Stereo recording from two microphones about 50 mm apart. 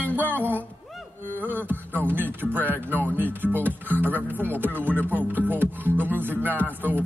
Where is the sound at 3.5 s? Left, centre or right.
Left.